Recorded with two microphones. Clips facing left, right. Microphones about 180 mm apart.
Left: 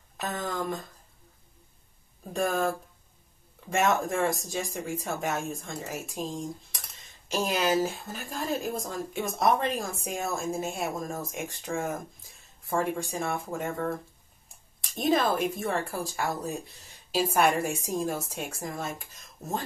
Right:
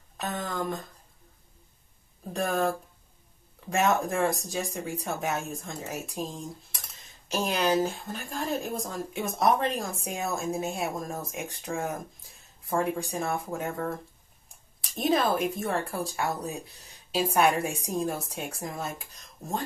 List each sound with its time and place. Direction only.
0.2 s speech: centre (ahead or behind)
2.2 s speech: centre (ahead or behind)